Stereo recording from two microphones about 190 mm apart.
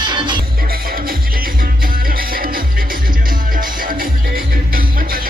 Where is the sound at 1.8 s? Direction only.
50° right (ahead or behind).